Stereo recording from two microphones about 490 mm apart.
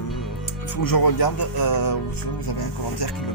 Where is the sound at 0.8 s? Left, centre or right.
Left.